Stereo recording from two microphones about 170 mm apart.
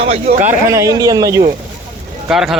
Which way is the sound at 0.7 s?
20° right (ahead or behind).